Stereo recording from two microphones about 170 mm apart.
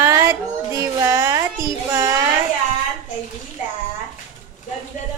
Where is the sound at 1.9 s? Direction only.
20° right (ahead or behind).